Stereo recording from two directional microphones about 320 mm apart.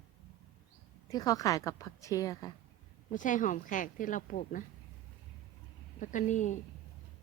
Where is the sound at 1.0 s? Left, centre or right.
Centre.